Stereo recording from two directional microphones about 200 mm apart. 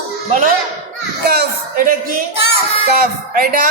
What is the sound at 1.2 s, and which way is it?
Speech, 50° right (ahead or behind).